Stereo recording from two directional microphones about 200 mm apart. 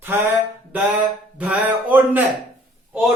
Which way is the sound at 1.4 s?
5° right (ahead or behind).